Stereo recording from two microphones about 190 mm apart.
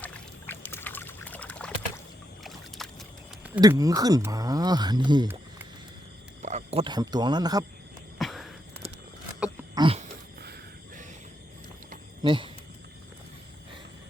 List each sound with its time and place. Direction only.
0.0 s pour: 10° left (ahead or behind)
2.4 s boat: centre (ahead or behind)
3.6 s speech: 20° right (ahead or behind)
6.4 s speech: 40° right (ahead or behind); by 7.6 s 20° right (ahead or behind)
8.2 s a sound: centre (ahead or behind)
9.7 s a sound: 25° right (ahead or behind)
12.2 s speech: 25° right (ahead or behind)